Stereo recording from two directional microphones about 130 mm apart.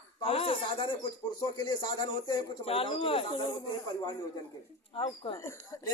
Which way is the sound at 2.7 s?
45° left (ahead or behind).